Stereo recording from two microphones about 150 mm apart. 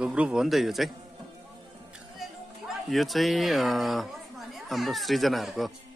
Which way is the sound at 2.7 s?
Centre (ahead or behind).